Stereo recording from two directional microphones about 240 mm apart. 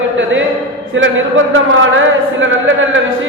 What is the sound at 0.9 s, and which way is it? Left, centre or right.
Speech, right.